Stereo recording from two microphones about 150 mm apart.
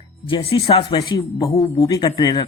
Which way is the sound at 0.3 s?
35° left (ahead or behind).